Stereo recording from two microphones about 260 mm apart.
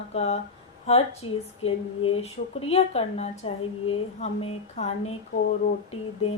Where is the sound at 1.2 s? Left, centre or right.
Centre.